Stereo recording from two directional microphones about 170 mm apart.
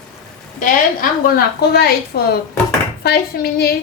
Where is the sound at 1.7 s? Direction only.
70° left (ahead or behind).